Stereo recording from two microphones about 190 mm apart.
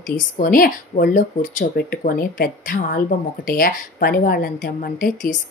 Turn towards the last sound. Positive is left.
turn(degrees=50)  # may be behind; listen again after turning